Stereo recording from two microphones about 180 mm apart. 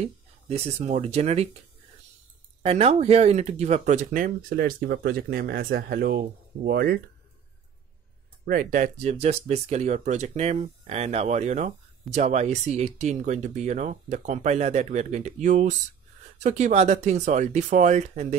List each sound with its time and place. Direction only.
0.0 s speech: 35° right (ahead or behind)
2.6 s speech: 35° right (ahead or behind); by 7.0 s 60° right (ahead or behind)
8.5 s speech: 50° right (ahead or behind)